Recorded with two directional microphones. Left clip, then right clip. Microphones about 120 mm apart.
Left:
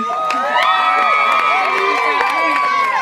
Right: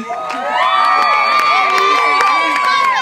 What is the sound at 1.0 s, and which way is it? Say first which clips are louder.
Crowd: right 1 dB; 45° right (ahead or behind).